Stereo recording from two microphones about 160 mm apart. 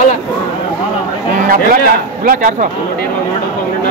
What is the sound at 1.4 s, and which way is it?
Speech, 60° right (ahead or behind).